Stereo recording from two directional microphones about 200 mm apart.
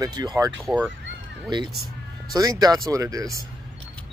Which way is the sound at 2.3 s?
20° right (ahead or behind).